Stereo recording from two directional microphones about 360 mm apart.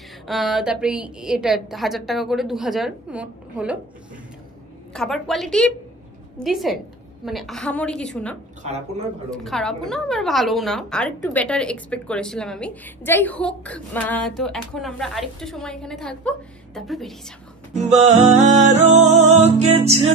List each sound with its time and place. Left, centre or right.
0.3 s a woman's voice: centre
4.9 s a woman's voice: centre
8.6 s music: centre
9.3 s a woman's voice: centre
17.7 s music: centre